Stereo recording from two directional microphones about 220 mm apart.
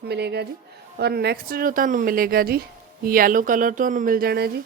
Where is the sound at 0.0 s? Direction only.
50° right (ahead or behind).